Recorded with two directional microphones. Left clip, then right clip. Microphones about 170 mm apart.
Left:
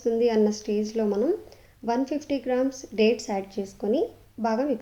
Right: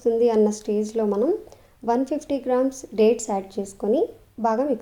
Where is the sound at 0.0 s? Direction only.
30° right (ahead or behind).